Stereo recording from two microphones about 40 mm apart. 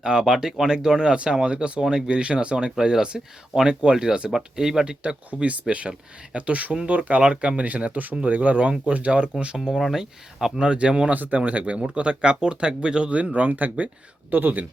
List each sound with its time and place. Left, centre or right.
0.0 s speech: centre
5.3 s speech: right
7.2 s speech: right
7.6 s speech: right
9.3 s speech: centre
10.6 s speech: right
11.1 s speech: right
13.1 s speech: right
14.3 s speech: right